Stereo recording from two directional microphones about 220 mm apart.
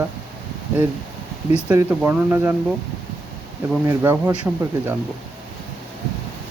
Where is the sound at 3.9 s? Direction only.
10° right (ahead or behind).